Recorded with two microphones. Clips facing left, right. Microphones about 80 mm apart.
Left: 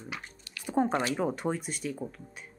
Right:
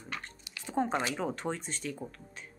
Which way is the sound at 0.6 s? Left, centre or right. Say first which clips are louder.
Left 4 dB; centre.